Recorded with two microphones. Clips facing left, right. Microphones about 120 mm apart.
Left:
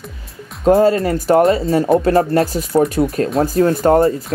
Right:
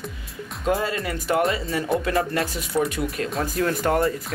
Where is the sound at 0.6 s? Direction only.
35° left (ahead or behind).